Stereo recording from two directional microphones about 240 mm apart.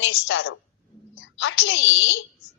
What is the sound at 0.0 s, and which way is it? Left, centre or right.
A woman's voice, left.